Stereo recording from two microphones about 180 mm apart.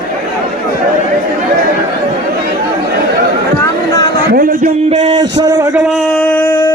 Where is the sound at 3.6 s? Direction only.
20° left (ahead or behind).